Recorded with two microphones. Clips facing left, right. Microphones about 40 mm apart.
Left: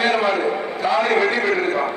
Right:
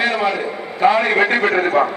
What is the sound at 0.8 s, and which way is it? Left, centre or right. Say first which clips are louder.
Speech: right 4 dB; right.